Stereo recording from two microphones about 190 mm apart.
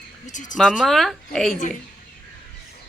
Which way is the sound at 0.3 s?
40° left (ahead or behind).